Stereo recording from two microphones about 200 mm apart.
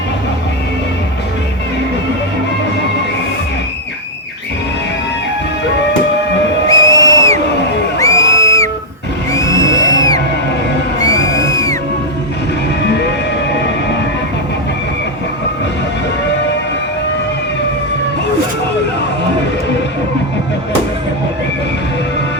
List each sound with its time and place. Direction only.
6.7 s music: 15° left (ahead or behind)